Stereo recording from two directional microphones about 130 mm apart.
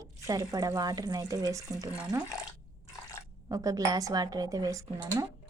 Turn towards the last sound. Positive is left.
turn(degrees=-25)  # may be behind; listen again after turning